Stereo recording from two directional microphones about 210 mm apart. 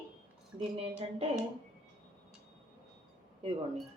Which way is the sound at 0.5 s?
25° right (ahead or behind).